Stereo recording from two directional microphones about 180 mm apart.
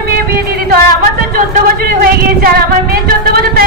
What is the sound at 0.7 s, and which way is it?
A woman's voice, 50° right (ahead or behind).